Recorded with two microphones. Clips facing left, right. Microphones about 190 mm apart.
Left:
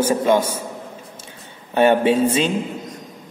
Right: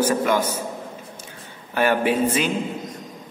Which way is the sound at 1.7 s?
25° left (ahead or behind).